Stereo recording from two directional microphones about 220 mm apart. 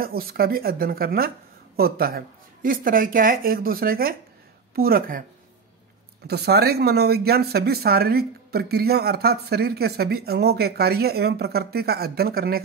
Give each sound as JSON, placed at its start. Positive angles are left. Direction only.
{"t": 0.0, "sound": "speech", "side_deg": -45}
{"t": 6.2, "sound": "speech", "side_deg": -45}